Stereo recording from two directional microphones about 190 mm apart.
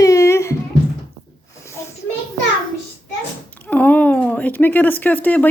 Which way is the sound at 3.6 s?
10° left (ahead or behind).